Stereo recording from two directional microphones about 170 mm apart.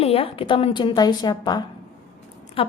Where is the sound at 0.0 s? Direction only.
35° left (ahead or behind).